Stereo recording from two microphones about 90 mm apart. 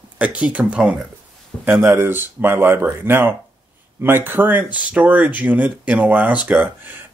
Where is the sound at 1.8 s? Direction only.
25° right (ahead or behind).